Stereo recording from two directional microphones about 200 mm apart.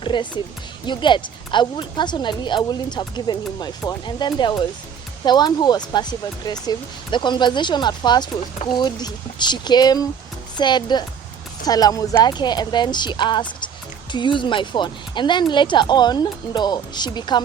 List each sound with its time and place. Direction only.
0.0 s music: 25° left (ahead or behind)
0.9 s speech: 25° left (ahead or behind)